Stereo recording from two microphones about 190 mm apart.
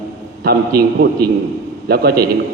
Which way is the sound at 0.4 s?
55° right (ahead or behind).